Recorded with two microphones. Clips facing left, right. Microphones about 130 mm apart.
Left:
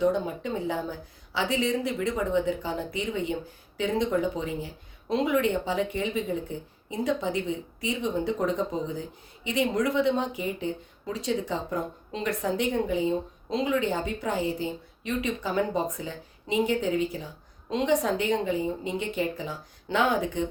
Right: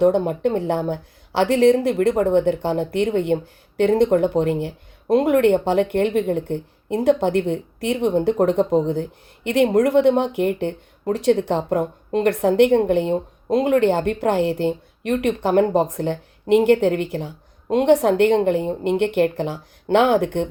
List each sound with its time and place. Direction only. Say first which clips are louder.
0.0 s speech: right 9 dB; 65° right (ahead or behind)